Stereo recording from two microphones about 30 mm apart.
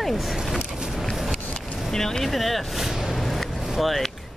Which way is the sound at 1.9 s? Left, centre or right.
Centre.